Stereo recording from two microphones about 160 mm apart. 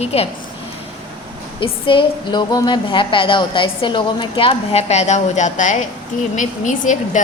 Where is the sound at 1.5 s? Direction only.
35° left (ahead or behind).